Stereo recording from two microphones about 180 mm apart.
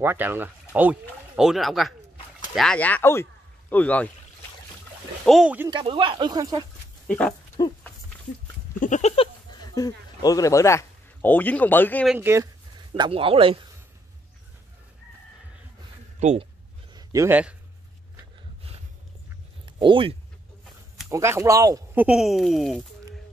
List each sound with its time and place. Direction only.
0.0 s speech: 10° right (ahead or behind); by 4.1 s 10° left (ahead or behind)
5.2 s speech: centre (ahead or behind)
5.7 s speech: 30° right (ahead or behind)
7.1 s speech: 5° left (ahead or behind)
7.6 s speech: 20° left (ahead or behind)
8.7 s speech: 45° left (ahead or behind); by 12.1 s 10° left (ahead or behind)
12.2 s speech: 15° right (ahead or behind)
12.9 s speech: 30° right (ahead or behind)
16.2 s speech: 40° right (ahead or behind)
16.9 s speech: 15° right (ahead or behind)
19.8 s speech: 30° right (ahead or behind)
21.1 s speech: 15° right (ahead or behind)
22.0 s speech: 5° right (ahead or behind)